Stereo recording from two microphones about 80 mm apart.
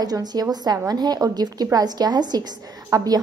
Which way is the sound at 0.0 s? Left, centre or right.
Right.